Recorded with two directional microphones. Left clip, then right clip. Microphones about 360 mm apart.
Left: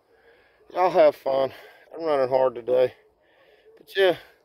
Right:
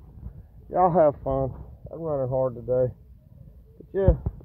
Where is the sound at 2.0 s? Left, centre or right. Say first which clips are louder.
Left 5 dB; left.